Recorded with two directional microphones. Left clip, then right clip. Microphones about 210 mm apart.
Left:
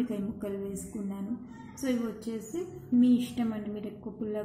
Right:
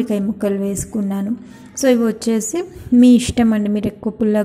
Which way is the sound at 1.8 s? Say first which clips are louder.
Right 18 dB; 40° right (ahead or behind).